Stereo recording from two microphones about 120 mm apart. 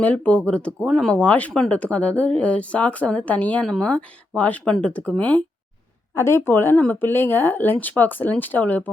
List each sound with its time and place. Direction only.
0.0 s speech: 10° left (ahead or behind)
6.1 s speech: 20° left (ahead or behind)